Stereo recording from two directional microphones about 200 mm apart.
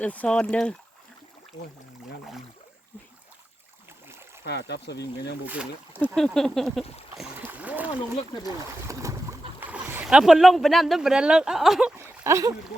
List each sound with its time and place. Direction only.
0.0 s speech: 5° left (ahead or behind)
4.4 s speech: 55° left (ahead or behind)
5.5 s speech: 5° right (ahead or behind)
6.1 s speech: 5° left (ahead or behind)
7.2 s splash: 10° right (ahead or behind)
8.9 s boat: 15° right (ahead or behind)
9.6 s speech: 10° right (ahead or behind)